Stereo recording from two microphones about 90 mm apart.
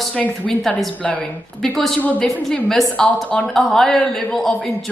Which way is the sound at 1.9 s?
15° left (ahead or behind).